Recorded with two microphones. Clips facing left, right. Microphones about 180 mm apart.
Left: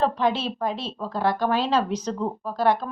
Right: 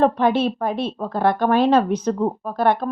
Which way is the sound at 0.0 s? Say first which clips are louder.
Right 6 dB; 55° right (ahead or behind).